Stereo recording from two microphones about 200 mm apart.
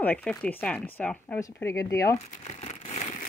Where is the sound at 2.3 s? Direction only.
35° left (ahead or behind).